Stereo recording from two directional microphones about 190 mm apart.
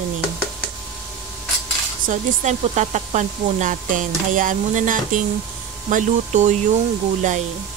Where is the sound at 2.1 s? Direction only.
40° right (ahead or behind).